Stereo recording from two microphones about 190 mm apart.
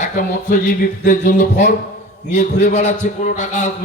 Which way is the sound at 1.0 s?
40° left (ahead or behind).